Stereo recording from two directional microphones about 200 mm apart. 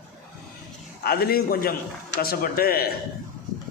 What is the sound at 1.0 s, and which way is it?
A man's voice, 50° left (ahead or behind).